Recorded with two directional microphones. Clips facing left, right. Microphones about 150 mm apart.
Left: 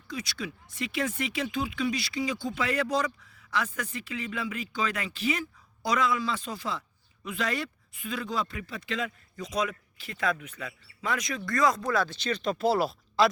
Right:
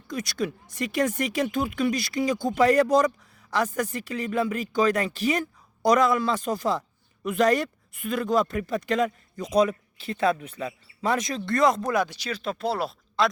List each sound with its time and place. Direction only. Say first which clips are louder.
0.1 s speech: right 7 dB; 45° right (ahead or behind); by 13.3 s centre (ahead or behind)